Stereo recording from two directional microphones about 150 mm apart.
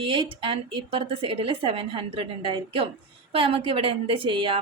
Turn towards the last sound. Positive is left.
turn(degrees=-35)  # may be behind; listen again after turning